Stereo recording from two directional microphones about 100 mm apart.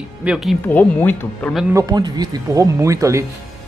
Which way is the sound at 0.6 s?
20° left (ahead or behind).